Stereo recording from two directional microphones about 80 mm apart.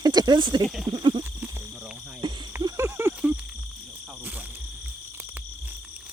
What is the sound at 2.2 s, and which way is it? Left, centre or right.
Frog, right.